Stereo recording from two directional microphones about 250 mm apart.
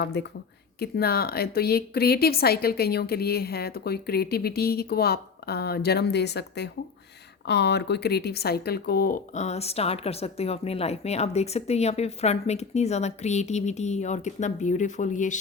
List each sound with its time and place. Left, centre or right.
0.0 s speech: left